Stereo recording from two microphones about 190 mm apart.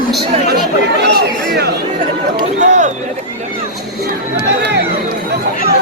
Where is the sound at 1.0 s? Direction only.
55° right (ahead or behind).